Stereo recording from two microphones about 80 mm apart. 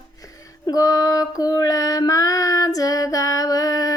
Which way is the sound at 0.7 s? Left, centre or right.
Left.